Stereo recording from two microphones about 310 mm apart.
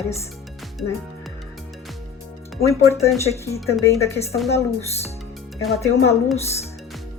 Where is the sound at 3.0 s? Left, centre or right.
Centre.